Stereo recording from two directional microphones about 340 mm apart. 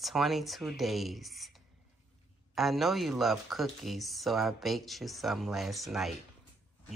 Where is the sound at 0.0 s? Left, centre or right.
Centre.